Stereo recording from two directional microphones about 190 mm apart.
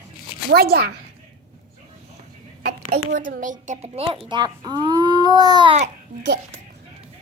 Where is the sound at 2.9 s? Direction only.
40° right (ahead or behind); by 5.8 s 25° right (ahead or behind).